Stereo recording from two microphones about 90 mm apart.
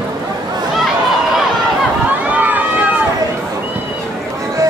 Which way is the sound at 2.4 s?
20° right (ahead or behind).